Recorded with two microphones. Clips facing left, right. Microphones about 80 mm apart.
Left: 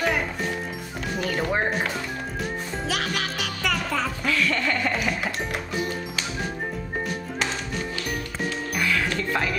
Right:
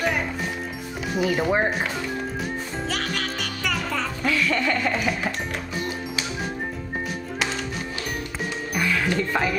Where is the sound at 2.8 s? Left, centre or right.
Centre.